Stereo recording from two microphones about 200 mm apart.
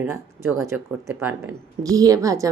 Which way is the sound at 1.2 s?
15° right (ahead or behind).